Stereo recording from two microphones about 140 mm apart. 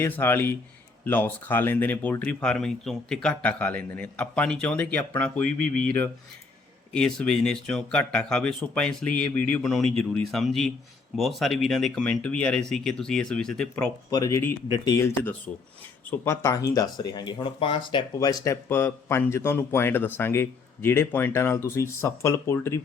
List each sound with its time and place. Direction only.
0.0 s speech: 15° left (ahead or behind)
6.9 s speech: 5° left (ahead or behind)
14.1 s speech: 25° left (ahead or behind)